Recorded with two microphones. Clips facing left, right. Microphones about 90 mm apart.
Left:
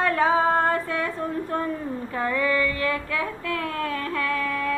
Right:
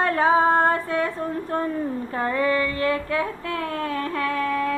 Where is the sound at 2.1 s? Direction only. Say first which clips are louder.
Right 1 dB; 35° right (ahead or behind).